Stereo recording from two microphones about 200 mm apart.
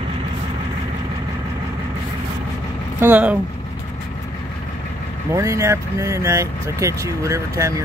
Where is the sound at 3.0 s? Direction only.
5° right (ahead or behind).